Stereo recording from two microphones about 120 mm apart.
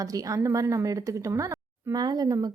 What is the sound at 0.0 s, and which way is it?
Speech, 30° right (ahead or behind).